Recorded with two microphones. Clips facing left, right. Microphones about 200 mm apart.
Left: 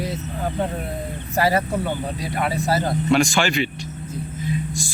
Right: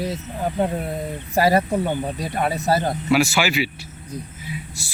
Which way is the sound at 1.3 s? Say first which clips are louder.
Right 2 dB; 35° right (ahead or behind).